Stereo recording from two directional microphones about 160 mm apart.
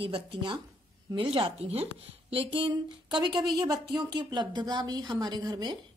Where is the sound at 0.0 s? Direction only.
30° right (ahead or behind).